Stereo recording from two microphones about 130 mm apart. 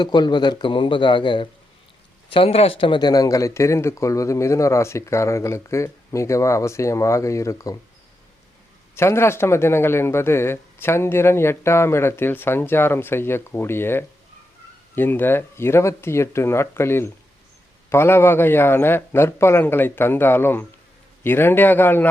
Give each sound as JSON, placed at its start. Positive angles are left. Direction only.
{"t": 0.0, "sound": "a man's voice", "side_deg": 35}
{"t": 9.0, "sound": "a man's voice", "side_deg": 20}